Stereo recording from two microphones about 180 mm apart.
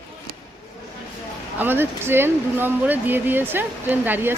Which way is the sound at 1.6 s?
10° right (ahead or behind).